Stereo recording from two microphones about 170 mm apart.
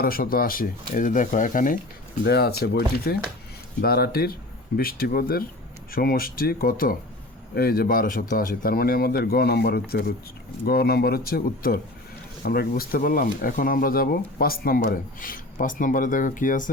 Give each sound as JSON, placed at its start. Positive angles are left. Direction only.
{"t": 0.0, "sound": "speech", "side_deg": 60}
{"t": 2.2, "sound": "speech", "side_deg": 70}